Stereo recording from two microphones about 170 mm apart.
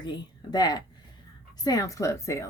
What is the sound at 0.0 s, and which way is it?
A woman's voice, 25° left (ahead or behind).